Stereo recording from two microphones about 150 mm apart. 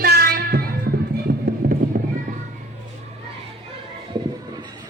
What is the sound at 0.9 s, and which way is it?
Music, 90° right.